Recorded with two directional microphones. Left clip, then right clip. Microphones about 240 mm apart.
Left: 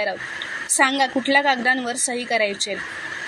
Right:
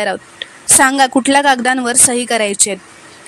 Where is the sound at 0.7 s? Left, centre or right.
Right.